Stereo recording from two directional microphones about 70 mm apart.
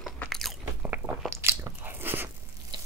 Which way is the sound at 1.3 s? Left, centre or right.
Right.